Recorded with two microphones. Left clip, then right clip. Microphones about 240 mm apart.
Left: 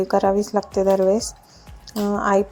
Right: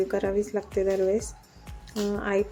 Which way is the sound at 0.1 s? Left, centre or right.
Centre.